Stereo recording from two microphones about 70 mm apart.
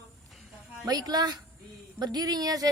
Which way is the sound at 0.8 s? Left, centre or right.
Right.